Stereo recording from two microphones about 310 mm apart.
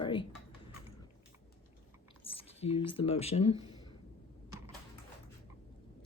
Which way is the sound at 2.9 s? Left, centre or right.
Centre.